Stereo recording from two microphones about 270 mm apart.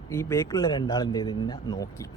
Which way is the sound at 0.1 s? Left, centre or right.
Centre.